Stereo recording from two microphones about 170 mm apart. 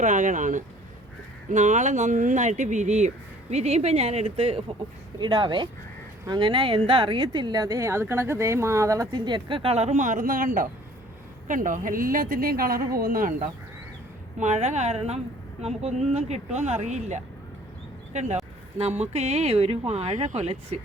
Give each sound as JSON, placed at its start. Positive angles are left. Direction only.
{"t": 0.0, "sound": "a woman's voice", "side_deg": -45}
{"t": 14.3, "sound": "speech", "side_deg": -45}